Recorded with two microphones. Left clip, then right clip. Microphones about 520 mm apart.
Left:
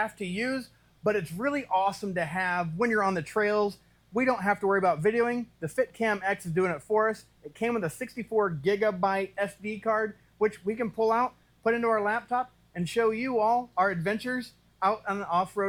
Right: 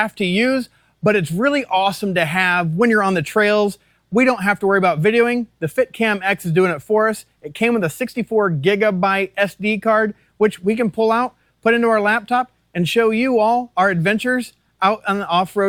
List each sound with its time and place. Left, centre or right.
0.0 s speech: right
1.2 s speech: right
9.6 s speech: right